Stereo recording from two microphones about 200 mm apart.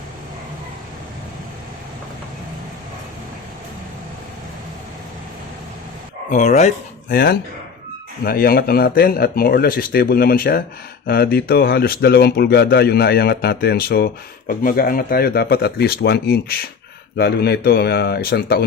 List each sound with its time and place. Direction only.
6.3 s speech: 35° left (ahead or behind)
7.1 s speech: 50° left (ahead or behind)